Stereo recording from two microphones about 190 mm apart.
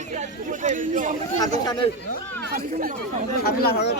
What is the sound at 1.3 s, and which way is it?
Speech, 20° left (ahead or behind).